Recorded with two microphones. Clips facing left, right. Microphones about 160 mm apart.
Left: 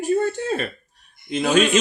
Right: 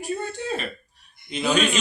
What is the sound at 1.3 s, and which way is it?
Speech, 50° left (ahead or behind).